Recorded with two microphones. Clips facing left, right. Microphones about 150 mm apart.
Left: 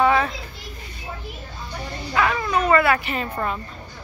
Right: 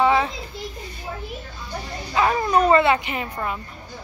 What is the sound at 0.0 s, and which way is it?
Children playing, 20° right (ahead or behind).